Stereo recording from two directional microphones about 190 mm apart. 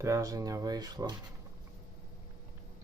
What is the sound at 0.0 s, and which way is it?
Speech, 15° right (ahead or behind).